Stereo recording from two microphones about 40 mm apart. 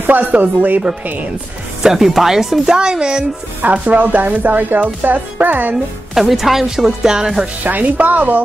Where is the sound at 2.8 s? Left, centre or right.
Right.